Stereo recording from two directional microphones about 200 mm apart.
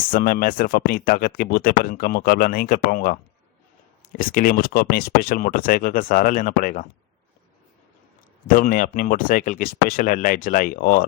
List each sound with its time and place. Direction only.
0.1 s speech: 45° left (ahead or behind)
8.4 s speech: 45° left (ahead or behind)